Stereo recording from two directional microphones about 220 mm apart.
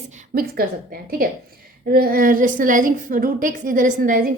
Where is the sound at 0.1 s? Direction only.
35° right (ahead or behind).